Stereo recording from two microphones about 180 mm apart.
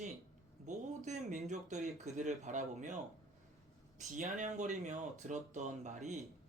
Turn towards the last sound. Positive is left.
turn(degrees=-40)  # may be behind; listen again after turning